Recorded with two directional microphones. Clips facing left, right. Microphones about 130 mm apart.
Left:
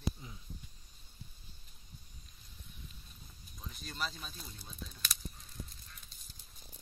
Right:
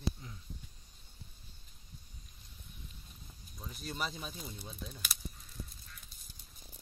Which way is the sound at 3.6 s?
10° right (ahead or behind).